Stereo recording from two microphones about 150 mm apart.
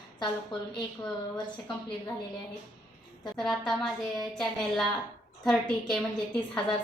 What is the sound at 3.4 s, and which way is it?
A woman's voice, centre (ahead or behind).